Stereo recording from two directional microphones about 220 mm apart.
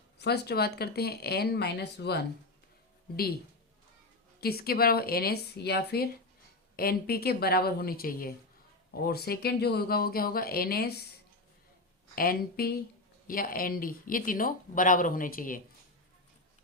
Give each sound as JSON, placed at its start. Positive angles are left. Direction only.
{"t": 0.2, "sound": "speech", "side_deg": 50}
{"t": 4.4, "sound": "speech", "side_deg": 45}
{"t": 12.1, "sound": "speech", "side_deg": 40}